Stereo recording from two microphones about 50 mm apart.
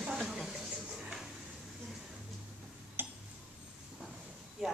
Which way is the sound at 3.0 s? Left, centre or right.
Right.